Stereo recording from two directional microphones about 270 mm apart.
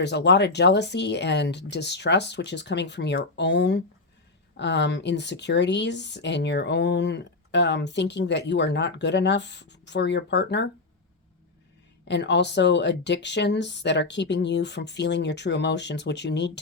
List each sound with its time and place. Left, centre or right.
0.0 s speech: left
12.0 s speech: left